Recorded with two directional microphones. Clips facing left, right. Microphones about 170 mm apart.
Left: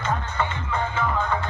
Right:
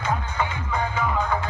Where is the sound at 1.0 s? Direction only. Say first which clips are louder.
Even; 10° right (ahead or behind).